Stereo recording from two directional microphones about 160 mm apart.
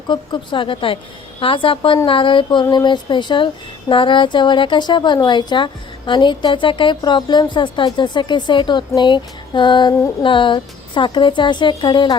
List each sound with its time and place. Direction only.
0.1 s speech: 30° left (ahead or behind)